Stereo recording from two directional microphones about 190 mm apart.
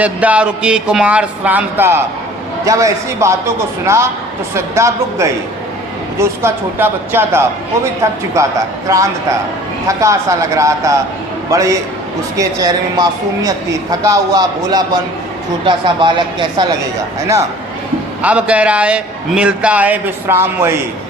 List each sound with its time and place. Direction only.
0.0 s a man's voice: 5° right (ahead or behind); by 16.6 s 25° right (ahead or behind)
18.2 s a man's voice: 5° right (ahead or behind)